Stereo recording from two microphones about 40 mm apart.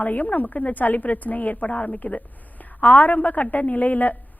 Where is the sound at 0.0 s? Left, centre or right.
Left.